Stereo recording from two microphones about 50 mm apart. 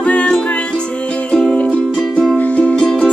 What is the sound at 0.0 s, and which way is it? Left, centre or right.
Music, left.